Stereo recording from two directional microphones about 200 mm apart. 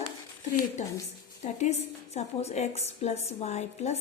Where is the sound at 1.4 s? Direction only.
35° left (ahead or behind).